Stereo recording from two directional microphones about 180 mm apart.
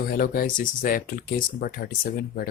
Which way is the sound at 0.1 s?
50° left (ahead or behind).